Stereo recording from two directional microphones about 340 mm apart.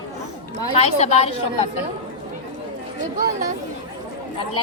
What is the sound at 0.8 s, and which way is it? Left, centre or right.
Speech, centre.